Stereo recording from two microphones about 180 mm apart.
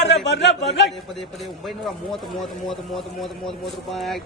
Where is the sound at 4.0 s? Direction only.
Centre (ahead or behind).